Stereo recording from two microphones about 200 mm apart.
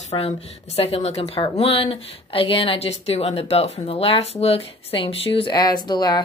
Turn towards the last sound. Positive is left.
turn(degrees=20)  # may be behind; listen again after turning